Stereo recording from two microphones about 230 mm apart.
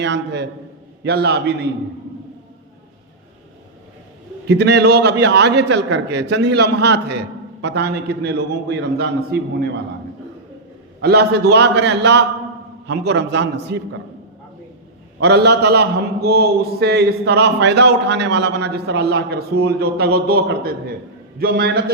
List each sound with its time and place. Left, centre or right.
0.0 s a man's voice: right
4.4 s a man's voice: right
11.0 s a man's voice: right
15.2 s a man's voice: right